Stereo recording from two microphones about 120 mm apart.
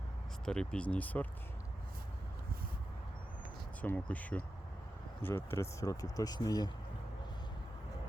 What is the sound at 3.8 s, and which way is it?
Speech, 15° left (ahead or behind).